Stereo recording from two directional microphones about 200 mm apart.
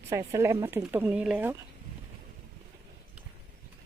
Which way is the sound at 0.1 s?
15° right (ahead or behind).